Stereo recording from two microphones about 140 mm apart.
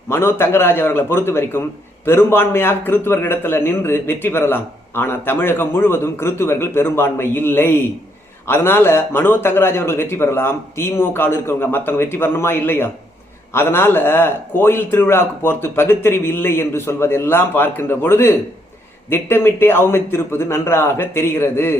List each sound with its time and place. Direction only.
0.1 s a man's voice: 15° left (ahead or behind)